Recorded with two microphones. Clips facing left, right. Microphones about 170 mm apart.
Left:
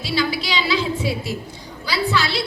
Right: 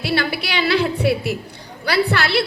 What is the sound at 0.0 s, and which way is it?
A woman's voice, 60° right (ahead or behind).